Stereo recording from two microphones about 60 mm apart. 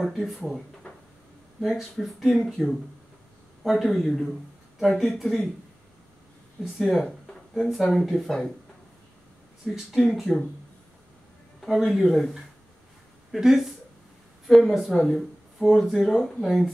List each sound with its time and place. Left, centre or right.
0.0 s speech: centre
1.6 s speech: centre
6.6 s speech: centre
9.9 s speech: centre
11.6 s speech: centre